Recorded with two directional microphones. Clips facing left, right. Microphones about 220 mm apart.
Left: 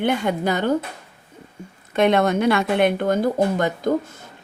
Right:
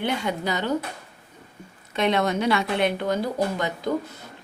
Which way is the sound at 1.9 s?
50° left (ahead or behind).